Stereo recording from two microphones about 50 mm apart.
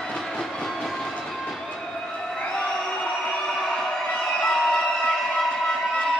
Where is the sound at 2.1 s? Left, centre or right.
Centre.